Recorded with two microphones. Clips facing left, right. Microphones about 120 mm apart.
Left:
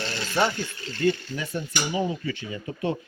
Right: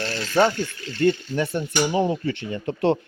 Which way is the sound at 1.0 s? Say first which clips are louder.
Right 4 dB; 55° right (ahead or behind).